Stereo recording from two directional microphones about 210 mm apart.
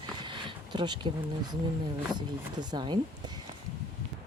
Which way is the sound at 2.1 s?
20° right (ahead or behind).